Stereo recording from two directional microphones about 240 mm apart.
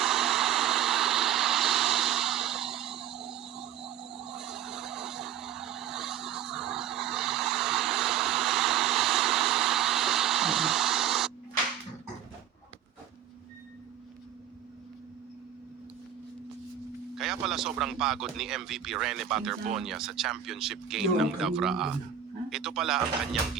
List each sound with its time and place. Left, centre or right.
0.0 s vehicle: centre
17.2 s a man's voice: centre